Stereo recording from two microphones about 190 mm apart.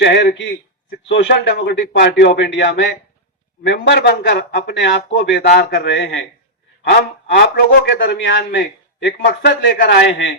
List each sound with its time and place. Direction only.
0.0 s a man's voice: 60° left (ahead or behind)
5.1 s a man's voice: 60° left (ahead or behind)